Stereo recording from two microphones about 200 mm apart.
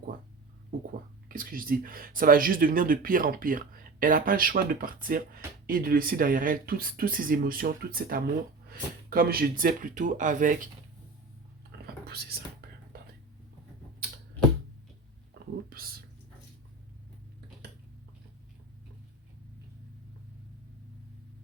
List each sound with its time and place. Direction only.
1.3 s speech: 45° right (ahead or behind)
12.0 s speech: 50° right (ahead or behind)
15.7 s a sound: 45° right (ahead or behind)